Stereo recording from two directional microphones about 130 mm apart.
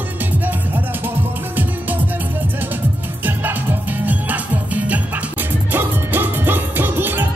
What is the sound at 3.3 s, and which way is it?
Music, 15° right (ahead or behind).